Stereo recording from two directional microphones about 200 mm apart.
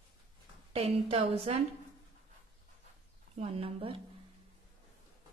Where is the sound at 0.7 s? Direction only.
30° right (ahead or behind).